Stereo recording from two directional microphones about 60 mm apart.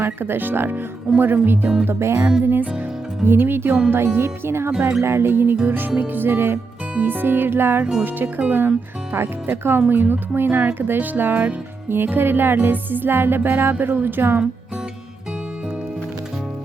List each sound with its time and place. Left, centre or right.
0.0 s music: right
1.8 s speech: right
2.4 s music: right
3.9 s speech: right
5.0 s music: right